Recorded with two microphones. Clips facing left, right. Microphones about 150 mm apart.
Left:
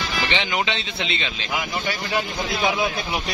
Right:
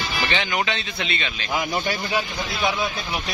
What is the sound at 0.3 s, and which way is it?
Speech, 20° left (ahead or behind).